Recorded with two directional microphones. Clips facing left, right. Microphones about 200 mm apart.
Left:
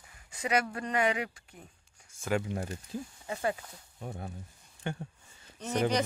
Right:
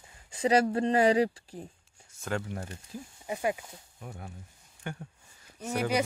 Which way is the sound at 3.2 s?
15° right (ahead or behind).